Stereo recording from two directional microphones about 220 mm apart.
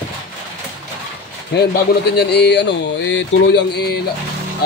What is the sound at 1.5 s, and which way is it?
Speech, 45° left (ahead or behind).